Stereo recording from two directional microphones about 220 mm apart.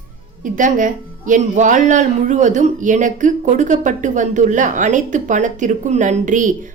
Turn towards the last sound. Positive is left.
turn(degrees=-35)  # may be behind; listen again after turning